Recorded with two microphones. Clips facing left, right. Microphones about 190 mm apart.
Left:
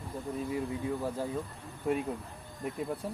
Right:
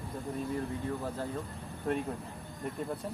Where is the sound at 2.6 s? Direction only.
5° left (ahead or behind).